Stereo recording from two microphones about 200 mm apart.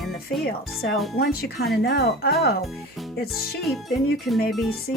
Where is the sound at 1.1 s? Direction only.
50° left (ahead or behind).